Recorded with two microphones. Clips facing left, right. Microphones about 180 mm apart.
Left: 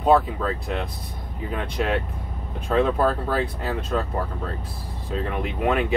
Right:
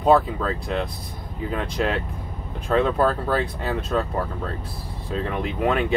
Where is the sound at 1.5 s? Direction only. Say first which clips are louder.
Even; 5° left (ahead or behind).